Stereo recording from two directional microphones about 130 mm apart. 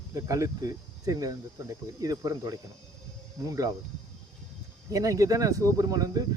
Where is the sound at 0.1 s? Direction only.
25° right (ahead or behind).